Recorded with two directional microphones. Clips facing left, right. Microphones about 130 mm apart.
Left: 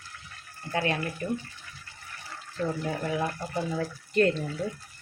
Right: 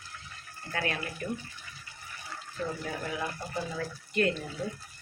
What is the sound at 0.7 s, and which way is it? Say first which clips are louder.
Speech: left 5 dB; 25° left (ahead or behind).